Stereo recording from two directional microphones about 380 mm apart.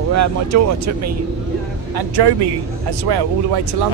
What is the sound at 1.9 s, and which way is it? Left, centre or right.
Speech, right.